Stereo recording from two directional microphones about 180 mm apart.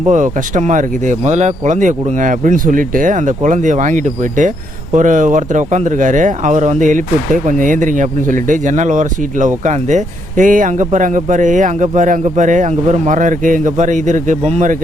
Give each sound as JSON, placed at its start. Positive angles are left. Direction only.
{"t": 0.0, "sound": "speech", "side_deg": -45}